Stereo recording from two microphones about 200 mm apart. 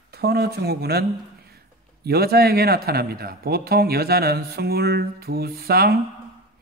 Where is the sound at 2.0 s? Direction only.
50° right (ahead or behind).